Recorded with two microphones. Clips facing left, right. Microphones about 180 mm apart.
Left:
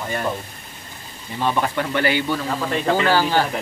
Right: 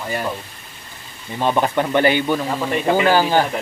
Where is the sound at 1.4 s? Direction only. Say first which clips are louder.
Right 3 dB; 20° right (ahead or behind).